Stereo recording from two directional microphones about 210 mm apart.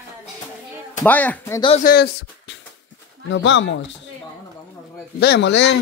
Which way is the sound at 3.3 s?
60° left (ahead or behind).